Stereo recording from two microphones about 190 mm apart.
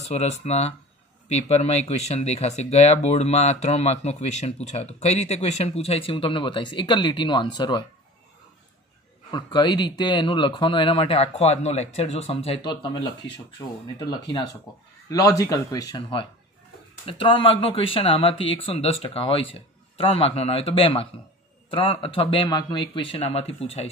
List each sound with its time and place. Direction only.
0.1 s speech: 35° left (ahead or behind)
9.3 s speech: 25° left (ahead or behind)
15.0 s speech: 20° left (ahead or behind)